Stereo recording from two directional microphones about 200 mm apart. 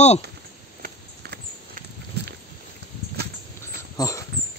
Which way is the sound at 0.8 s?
50° right (ahead or behind).